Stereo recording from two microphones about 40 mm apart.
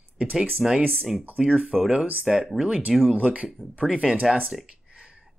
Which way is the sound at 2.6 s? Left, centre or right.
Right.